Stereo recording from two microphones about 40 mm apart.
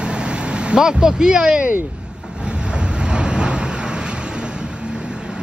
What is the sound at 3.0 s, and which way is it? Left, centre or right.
Vehicle, right.